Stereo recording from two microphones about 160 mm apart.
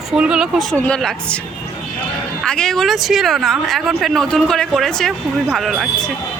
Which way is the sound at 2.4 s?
5° left (ahead or behind).